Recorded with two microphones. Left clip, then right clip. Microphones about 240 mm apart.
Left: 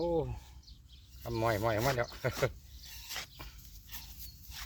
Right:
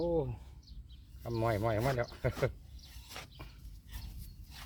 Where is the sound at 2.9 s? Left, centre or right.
Centre.